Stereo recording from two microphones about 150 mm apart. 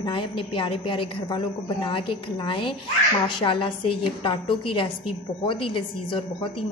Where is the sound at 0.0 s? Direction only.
35° left (ahead or behind).